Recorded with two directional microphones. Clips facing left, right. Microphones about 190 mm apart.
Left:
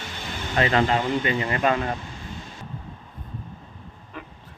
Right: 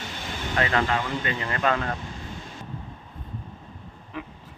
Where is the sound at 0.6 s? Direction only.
25° left (ahead or behind).